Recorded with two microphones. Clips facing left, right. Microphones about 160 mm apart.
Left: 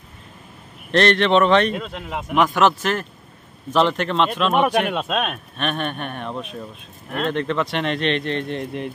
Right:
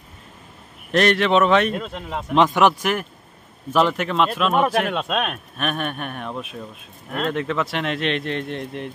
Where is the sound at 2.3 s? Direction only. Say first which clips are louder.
Right 1 dB; 20° right (ahead or behind); by 8.9 s centre (ahead or behind).